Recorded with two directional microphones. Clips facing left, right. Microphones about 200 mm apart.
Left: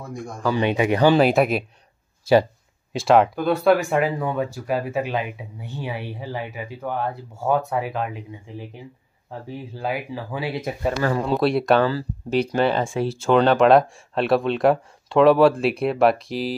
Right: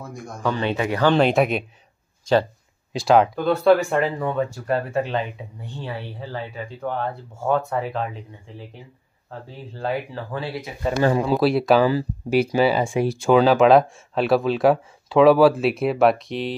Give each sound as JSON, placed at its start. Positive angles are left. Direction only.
{"t": 0.0, "sound": "speech", "side_deg": 0}
{"t": 0.6, "sound": "speech", "side_deg": 15}
{"t": 1.1, "sound": "speech", "side_deg": 0}
{"t": 2.9, "sound": "speech", "side_deg": 0}
{"t": 11.0, "sound": "speech", "side_deg": -20}
{"t": 11.2, "sound": "speech", "side_deg": 0}
{"t": 11.9, "sound": "speech", "side_deg": -15}
{"t": 13.4, "sound": "speech", "side_deg": -5}